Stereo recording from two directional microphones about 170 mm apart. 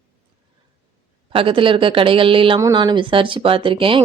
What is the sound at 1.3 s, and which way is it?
A woman's voice, 30° right (ahead or behind).